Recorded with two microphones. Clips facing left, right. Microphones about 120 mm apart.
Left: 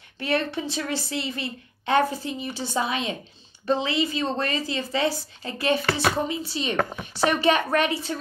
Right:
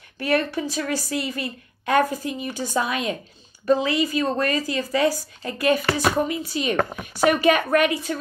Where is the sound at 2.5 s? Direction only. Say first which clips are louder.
Right 3 dB; 45° right (ahead or behind).